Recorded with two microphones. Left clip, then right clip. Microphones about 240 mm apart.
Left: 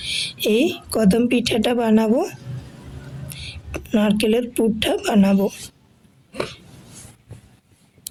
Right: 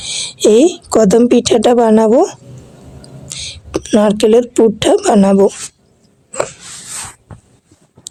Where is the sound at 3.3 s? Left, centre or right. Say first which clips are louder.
Right 12 dB; centre.